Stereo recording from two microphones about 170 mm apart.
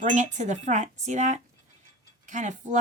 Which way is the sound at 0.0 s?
45° right (ahead or behind).